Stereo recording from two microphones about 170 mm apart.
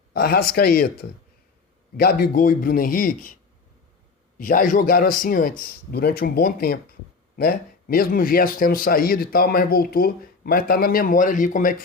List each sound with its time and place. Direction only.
0.1 s a man's voice: 60° left (ahead or behind)
4.4 s a man's voice: 55° left (ahead or behind)